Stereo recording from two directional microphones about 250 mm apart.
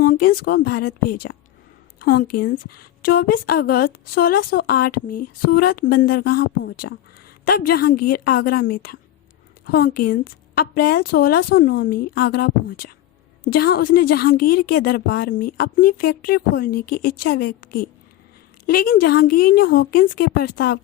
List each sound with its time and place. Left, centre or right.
0.0 s a woman's voice: left